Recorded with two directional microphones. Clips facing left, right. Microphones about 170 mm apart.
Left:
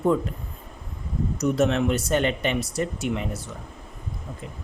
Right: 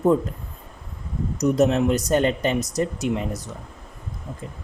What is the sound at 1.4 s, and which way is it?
Speech, 35° right (ahead or behind).